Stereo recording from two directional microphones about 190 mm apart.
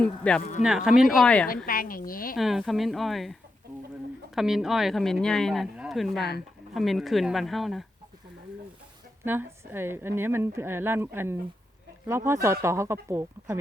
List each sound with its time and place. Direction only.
0.0 s speech: 5° left (ahead or behind)
1.6 s a woman's voice: 50° left (ahead or behind)
2.3 s speech: centre (ahead or behind)
4.4 s speech: centre (ahead or behind)
9.2 s a woman's voice: 10° right (ahead or behind)